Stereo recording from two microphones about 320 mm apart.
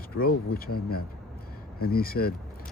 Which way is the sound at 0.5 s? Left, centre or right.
Left.